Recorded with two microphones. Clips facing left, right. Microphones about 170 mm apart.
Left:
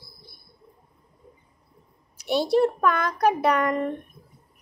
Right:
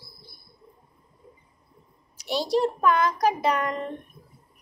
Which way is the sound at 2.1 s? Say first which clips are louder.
Left 3 dB; 55° left (ahead or behind).